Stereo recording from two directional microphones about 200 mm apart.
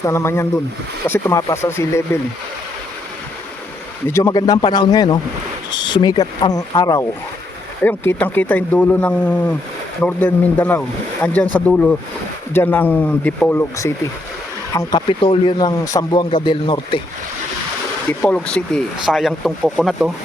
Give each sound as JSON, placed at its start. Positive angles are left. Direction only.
{"t": 0.0, "sound": "speech", "side_deg": 15}
{"t": 4.1, "sound": "speech", "side_deg": 15}
{"t": 18.2, "sound": "speech", "side_deg": 5}